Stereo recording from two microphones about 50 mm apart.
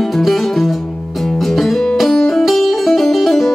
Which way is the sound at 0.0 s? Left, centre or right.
Centre.